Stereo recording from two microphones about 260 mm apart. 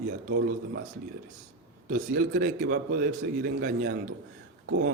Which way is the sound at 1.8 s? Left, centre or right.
Right.